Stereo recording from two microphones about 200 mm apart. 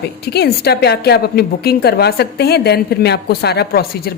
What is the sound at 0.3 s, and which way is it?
A woman's voice, 55° left (ahead or behind).